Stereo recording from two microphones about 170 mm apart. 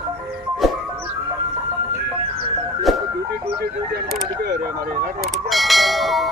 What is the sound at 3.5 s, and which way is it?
Vehicle, 65° right (ahead or behind).